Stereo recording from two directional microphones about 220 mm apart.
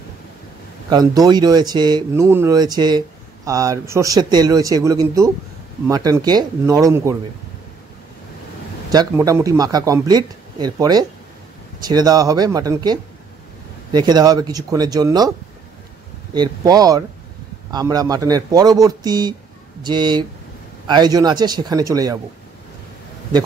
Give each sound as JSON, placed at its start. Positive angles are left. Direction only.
{"t": 0.8, "sound": "speech", "side_deg": -20}
{"t": 9.1, "sound": "speech", "side_deg": -15}
{"t": 16.3, "sound": "speech", "side_deg": -15}